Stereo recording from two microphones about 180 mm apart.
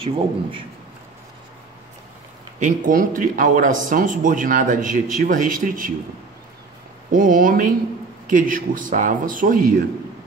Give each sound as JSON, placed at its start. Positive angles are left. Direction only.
{"t": 0.0, "sound": "a man's voice", "side_deg": -30}
{"t": 2.6, "sound": "a man's voice", "side_deg": -50}
{"t": 7.1, "sound": "a man's voice", "side_deg": -45}